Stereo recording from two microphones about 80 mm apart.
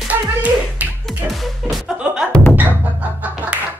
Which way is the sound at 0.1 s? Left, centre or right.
Centre.